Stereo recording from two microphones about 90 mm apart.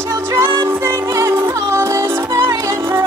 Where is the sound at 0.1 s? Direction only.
35° right (ahead or behind).